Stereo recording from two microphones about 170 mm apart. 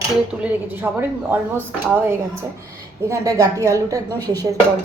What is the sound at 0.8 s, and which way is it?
Speech, 15° right (ahead or behind).